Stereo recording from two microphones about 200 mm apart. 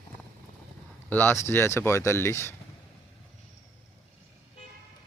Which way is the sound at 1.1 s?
10° left (ahead or behind).